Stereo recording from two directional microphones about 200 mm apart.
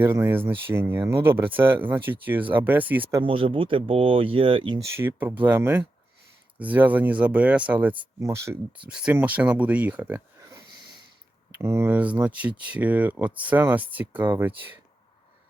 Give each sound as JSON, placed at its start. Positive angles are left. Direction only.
{"t": 0.0, "sound": "speech", "side_deg": -10}
{"t": 3.2, "sound": "speech", "side_deg": -25}